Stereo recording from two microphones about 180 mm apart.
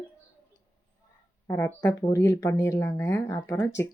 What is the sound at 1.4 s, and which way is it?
A woman's voice, 15° left (ahead or behind).